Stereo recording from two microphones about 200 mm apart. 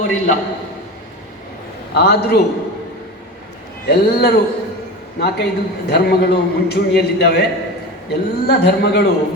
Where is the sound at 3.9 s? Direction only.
50° left (ahead or behind).